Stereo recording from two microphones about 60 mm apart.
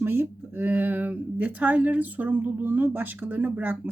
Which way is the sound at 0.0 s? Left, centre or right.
Right.